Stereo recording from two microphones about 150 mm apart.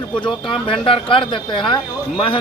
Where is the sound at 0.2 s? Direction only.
35° left (ahead or behind).